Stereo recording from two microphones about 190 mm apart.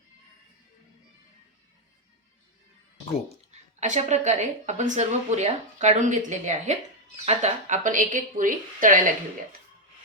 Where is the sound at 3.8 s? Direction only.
40° right (ahead or behind).